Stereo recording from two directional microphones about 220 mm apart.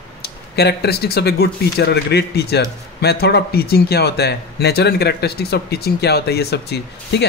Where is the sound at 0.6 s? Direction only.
45° left (ahead or behind).